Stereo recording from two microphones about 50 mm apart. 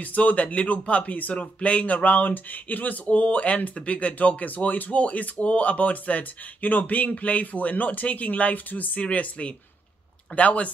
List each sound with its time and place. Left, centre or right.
0.0 s speech: left